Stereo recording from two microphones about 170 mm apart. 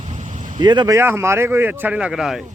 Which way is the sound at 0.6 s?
25° right (ahead or behind).